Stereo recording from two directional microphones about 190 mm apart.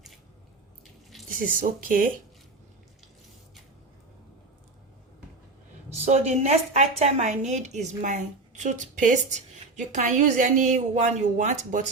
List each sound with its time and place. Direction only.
1.3 s speech: 45° right (ahead or behind)
5.9 s a woman's voice: 35° right (ahead or behind)